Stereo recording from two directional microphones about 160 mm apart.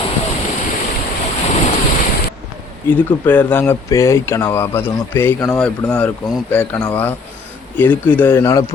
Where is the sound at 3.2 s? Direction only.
10° left (ahead or behind).